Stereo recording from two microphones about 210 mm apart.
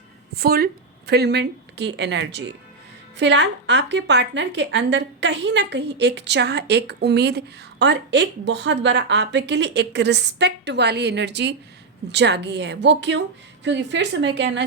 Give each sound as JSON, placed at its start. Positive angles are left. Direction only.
{"t": 0.3, "sound": "a woman's voice", "side_deg": -45}